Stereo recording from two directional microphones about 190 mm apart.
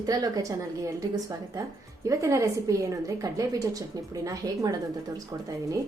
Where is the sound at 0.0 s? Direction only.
20° right (ahead or behind).